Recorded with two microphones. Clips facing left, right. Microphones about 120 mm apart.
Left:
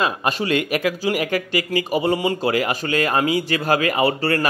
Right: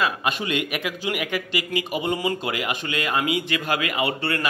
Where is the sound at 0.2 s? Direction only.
35° left (ahead or behind).